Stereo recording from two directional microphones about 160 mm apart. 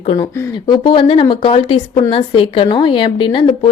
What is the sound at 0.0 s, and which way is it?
Speech, 40° left (ahead or behind).